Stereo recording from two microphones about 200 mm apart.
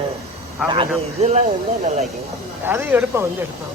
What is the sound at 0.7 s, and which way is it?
Speech, 30° right (ahead or behind).